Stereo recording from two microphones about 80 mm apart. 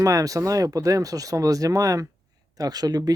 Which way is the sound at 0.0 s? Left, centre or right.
Right.